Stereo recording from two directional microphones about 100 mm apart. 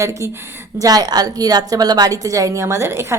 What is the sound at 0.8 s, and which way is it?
A woman's voice, 40° right (ahead or behind).